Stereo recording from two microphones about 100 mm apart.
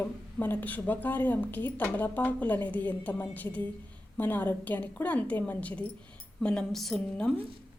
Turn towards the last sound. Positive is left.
turn(degrees=5)  # may be behind; listen again after turning